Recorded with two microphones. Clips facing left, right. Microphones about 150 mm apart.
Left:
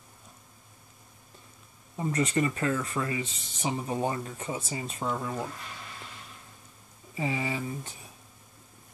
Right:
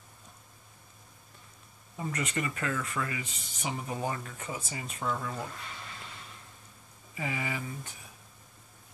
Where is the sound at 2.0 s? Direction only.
30° left (ahead or behind).